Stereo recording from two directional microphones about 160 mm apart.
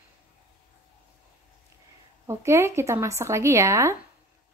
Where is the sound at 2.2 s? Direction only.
15° right (ahead or behind).